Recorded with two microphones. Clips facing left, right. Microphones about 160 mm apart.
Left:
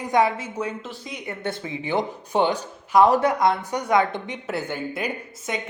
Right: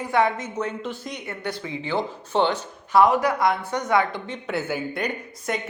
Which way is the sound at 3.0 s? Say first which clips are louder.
Left 1 dB; 25° left (ahead or behind).